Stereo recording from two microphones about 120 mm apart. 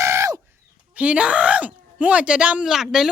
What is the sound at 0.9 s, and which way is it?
Speech, 10° right (ahead or behind).